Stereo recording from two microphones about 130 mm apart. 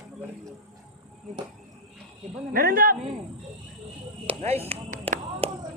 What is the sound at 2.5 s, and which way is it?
Speech, 90° right.